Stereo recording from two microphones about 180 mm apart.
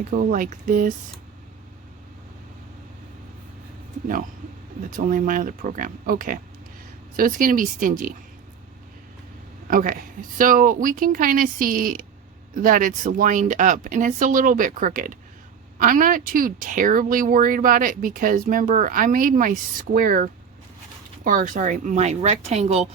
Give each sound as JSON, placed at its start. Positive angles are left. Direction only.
{"t": 0.0, "sound": "speech", "side_deg": -45}
{"t": 4.9, "sound": "speech", "side_deg": -45}
{"t": 9.6, "sound": "a woman's voice", "side_deg": -50}